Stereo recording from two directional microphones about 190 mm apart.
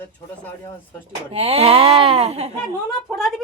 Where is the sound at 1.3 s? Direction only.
30° right (ahead or behind).